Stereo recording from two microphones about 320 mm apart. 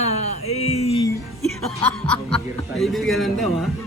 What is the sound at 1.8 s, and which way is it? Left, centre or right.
Speech, centre.